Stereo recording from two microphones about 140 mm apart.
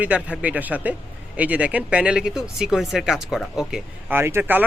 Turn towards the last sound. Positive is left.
turn(degrees=-15)  # may be behind; listen again after turning